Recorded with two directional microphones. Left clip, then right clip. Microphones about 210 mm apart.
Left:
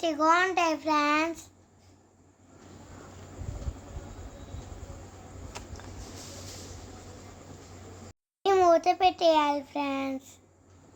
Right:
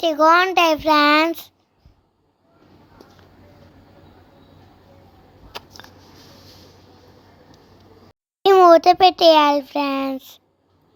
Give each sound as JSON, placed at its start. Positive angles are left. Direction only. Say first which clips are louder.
{"t": 0.0, "sound": "a child's voice", "louder": "right 10 dB", "side_deg": -30}
{"t": 5.5, "sound": "a sound", "louder": "right 9 dB", "side_deg": -20}
{"t": 8.5, "sound": "a child's voice", "louder": "right 11 dB", "side_deg": -25}